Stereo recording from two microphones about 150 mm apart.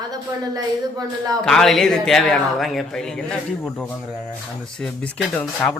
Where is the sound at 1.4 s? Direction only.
5° left (ahead or behind).